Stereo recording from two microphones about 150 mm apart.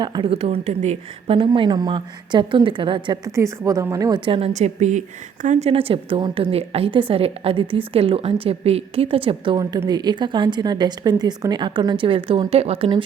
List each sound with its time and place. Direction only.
0.0 s a woman's voice: 30° right (ahead or behind)
0.3 s a woman's voice: 45° right (ahead or behind); by 4.2 s 25° right (ahead or behind)
4.3 s a woman's voice: 40° right (ahead or behind)
9.6 s a woman's voice: 25° right (ahead or behind); by 12.9 s 45° right (ahead or behind)